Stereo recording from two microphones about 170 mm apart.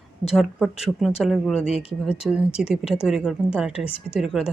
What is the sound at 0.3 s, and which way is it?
Speech, centre (ahead or behind).